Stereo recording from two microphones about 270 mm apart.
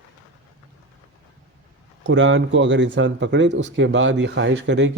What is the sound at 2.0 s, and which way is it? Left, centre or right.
Speech, right.